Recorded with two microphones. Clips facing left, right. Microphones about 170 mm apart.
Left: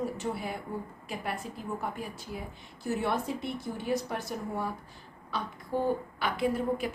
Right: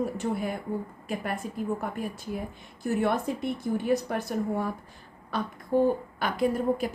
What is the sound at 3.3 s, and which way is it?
A woman's voice, 50° right (ahead or behind).